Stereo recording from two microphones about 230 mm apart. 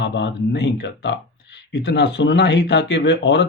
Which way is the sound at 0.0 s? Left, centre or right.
Left.